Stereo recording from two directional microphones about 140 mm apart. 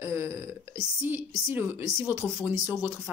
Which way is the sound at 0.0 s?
15° right (ahead or behind).